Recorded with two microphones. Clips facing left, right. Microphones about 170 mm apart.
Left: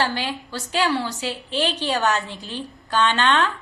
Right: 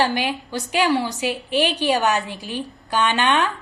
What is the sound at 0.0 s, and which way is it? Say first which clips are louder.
A woman's voice: right 3 dB; 15° right (ahead or behind).